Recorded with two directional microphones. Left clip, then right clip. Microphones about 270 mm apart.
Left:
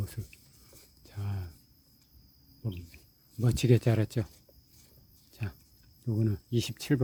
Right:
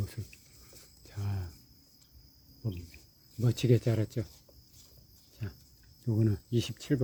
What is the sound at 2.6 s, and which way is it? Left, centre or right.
Cricket, centre.